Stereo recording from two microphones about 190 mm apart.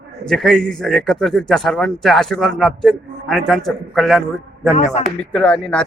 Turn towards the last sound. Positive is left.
turn(degrees=5)  # may be behind; listen again after turning